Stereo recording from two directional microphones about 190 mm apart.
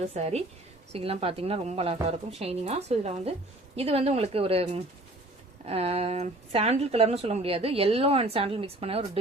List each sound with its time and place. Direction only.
0.0 s speech: 35° right (ahead or behind)